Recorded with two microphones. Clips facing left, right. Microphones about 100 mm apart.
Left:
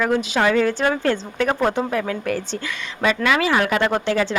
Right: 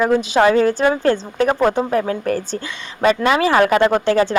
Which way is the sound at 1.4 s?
25° right (ahead or behind).